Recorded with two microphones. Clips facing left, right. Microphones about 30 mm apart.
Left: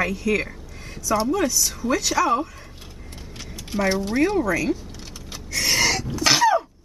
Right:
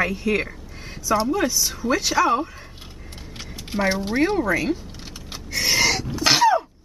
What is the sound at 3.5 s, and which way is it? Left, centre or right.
Speech, centre.